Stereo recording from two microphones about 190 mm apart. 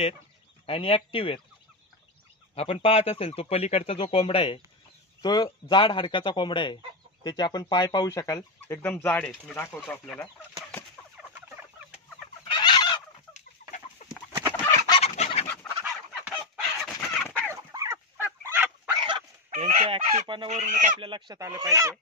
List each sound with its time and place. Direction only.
0.7 s speech: 30° left (ahead or behind)
2.5 s speech: 30° left (ahead or behind); by 10.2 s 5° left (ahead or behind)
12.4 s fowl: 25° left (ahead or behind)
14.0 s chicken: 40° left (ahead or behind)
14.5 s fowl: 10° left (ahead or behind)
14.9 s fowl: 35° left (ahead or behind)
15.4 s fowl: 10° left (ahead or behind)
15.8 s fowl: 5° right (ahead or behind)
17.5 s fowl: 15° right (ahead or behind)
19.5 s chicken: 35° right (ahead or behind)
21.0 s speech: 25° right (ahead or behind)